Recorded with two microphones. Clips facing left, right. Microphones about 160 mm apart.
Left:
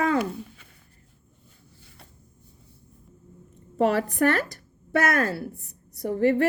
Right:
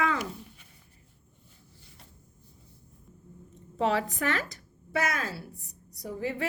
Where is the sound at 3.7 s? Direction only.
50° left (ahead or behind).